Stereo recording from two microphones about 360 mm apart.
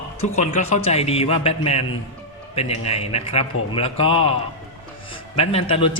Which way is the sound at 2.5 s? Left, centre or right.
Centre.